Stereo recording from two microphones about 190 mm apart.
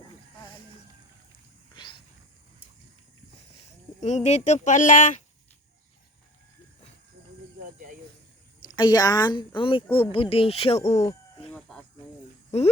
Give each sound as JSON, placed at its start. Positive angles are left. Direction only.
{"t": 1.7, "sound": "wild animals", "side_deg": 25}
{"t": 4.0, "sound": "speech", "side_deg": 35}
{"t": 8.6, "sound": "speech", "side_deg": 20}
{"t": 11.5, "sound": "a sound", "side_deg": 5}
{"t": 12.5, "sound": "speech", "side_deg": 35}